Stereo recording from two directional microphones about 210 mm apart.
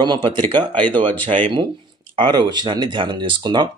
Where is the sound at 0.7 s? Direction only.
5° left (ahead or behind).